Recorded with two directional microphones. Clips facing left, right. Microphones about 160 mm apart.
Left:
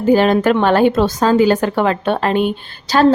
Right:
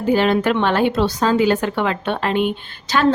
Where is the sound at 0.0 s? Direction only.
45° left (ahead or behind).